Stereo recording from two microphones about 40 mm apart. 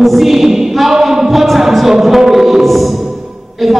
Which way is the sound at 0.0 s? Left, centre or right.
Centre.